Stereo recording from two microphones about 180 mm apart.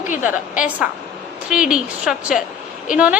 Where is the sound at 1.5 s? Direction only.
5° right (ahead or behind).